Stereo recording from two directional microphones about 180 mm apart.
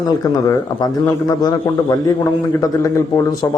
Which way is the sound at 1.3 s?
20° left (ahead or behind).